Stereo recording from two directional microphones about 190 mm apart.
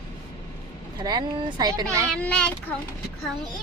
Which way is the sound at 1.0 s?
20° right (ahead or behind).